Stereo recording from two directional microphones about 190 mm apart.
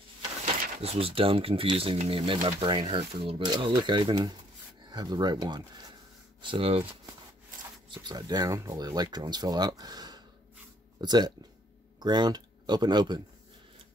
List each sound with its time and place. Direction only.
0.8 s speech: 30° right (ahead or behind)